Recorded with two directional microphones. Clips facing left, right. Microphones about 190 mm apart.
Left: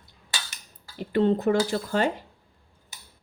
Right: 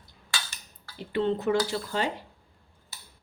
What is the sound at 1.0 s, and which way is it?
A woman's voice, 45° left (ahead or behind).